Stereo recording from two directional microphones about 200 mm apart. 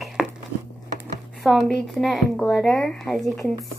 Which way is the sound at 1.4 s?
Centre (ahead or behind).